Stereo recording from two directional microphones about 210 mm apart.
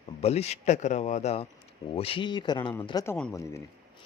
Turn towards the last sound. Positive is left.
turn(degrees=15)  # may be behind; listen again after turning